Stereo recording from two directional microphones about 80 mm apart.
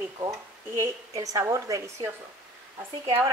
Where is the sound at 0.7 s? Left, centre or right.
Right.